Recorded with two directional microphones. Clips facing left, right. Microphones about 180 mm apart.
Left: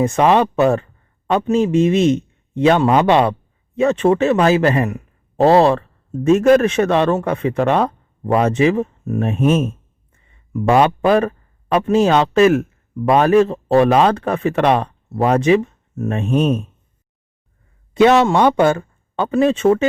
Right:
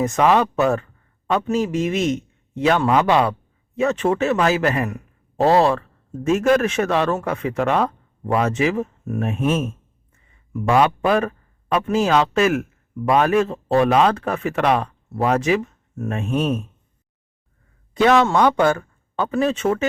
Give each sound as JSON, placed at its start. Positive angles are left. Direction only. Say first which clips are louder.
{"t": 0.0, "sound": "a man's voice", "louder": "left 3 dB", "side_deg": 30}
{"t": 17.9, "sound": "a man's voice", "louder": "left 4 dB", "side_deg": 20}